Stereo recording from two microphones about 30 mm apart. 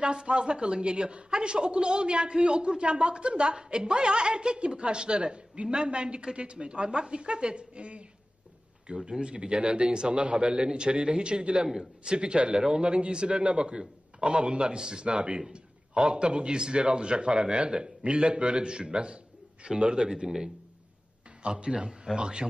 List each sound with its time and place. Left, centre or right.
0.0 s a woman's voice: right
15.1 s a woman's voice: right
20.0 s speech: right
21.4 s a man's voice: right
21.7 s speech: right